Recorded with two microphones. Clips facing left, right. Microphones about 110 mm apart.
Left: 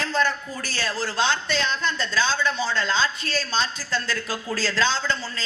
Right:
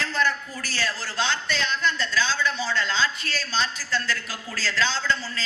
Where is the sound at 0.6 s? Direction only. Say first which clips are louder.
Left 3 dB; 25° left (ahead or behind).